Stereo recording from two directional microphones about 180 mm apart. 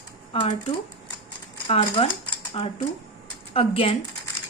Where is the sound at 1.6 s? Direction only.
30° left (ahead or behind).